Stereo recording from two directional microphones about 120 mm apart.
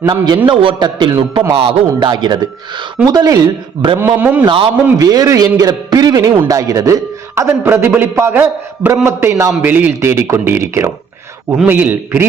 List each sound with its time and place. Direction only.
0.0 s a man's voice: 35° right (ahead or behind)
4.0 s a man's voice: 15° right (ahead or behind)
4.4 s a man's voice: 50° right (ahead or behind)
4.9 s a man's voice: 30° right (ahead or behind)